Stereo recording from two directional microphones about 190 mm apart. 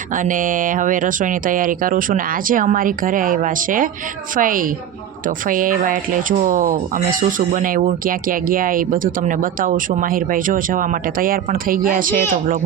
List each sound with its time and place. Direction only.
0.2 s speech: 45° right (ahead or behind)